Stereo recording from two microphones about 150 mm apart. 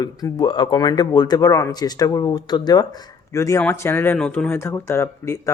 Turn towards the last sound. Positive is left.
turn(degrees=20)  # may be behind; listen again after turning